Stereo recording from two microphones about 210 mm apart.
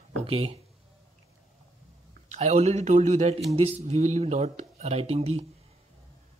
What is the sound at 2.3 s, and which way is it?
Speech, 35° right (ahead or behind).